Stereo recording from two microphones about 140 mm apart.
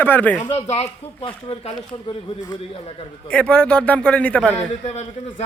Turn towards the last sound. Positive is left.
turn(degrees=50)  # may be behind; listen again after turning